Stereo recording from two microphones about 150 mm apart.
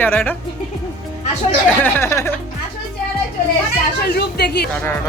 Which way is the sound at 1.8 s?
15° left (ahead or behind).